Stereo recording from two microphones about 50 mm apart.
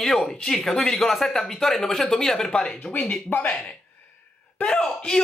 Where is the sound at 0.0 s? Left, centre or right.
Centre.